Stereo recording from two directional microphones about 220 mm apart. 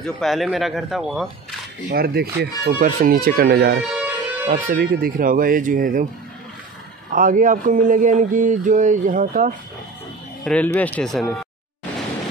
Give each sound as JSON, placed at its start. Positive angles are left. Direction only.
{"t": 0.0, "sound": "speech", "side_deg": 0}
{"t": 1.9, "sound": "speech", "side_deg": -45}
{"t": 3.9, "sound": "music", "side_deg": -5}
{"t": 4.5, "sound": "mantra", "side_deg": -40}
{"t": 7.1, "sound": "mantra", "side_deg": -40}
{"t": 10.4, "sound": "speech", "side_deg": 5}